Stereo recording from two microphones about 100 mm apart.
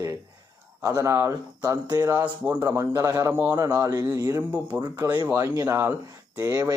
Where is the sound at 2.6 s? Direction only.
30° right (ahead or behind).